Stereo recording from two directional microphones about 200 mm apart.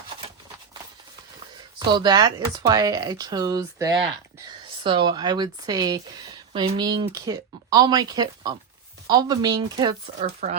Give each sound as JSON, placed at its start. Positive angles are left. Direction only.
{"t": 1.9, "sound": "speech", "side_deg": -20}
{"t": 10.4, "sound": "speech", "side_deg": -40}